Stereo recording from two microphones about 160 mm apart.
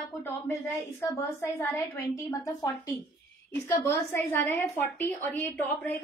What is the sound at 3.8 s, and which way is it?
A woman's voice, 15° left (ahead or behind).